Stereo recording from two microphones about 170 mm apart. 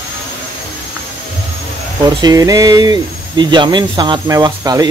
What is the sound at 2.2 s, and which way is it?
Speech, 20° right (ahead or behind).